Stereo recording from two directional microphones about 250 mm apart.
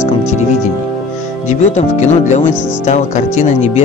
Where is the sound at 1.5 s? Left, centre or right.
Left.